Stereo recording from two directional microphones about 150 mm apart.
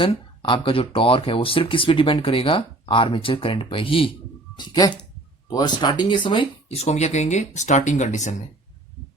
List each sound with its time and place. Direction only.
0.0 s speech: 35° left (ahead or behind); by 8.4 s 55° left (ahead or behind)